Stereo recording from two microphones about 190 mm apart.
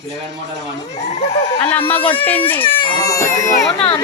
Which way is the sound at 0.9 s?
35° left (ahead or behind).